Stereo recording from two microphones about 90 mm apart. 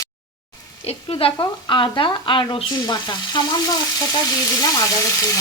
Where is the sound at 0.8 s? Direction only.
90° left; by 2.4 s 65° left (ahead or behind).